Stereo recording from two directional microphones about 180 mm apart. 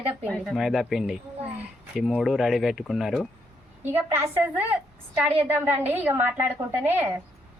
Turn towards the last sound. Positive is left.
turn(degrees=-10)  # may be behind; listen again after turning